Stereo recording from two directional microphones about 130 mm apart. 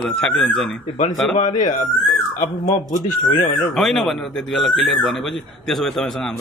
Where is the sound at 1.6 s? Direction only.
75° left (ahead or behind).